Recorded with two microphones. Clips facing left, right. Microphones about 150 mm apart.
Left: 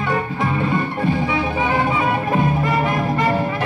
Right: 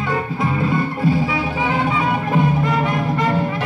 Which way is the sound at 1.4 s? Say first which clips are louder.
Left 1 dB; 5° right (ahead or behind).